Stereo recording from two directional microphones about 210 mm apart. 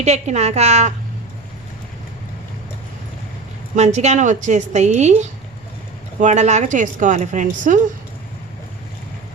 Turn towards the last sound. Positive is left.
turn(degrees=-35)  # may be behind; listen again after turning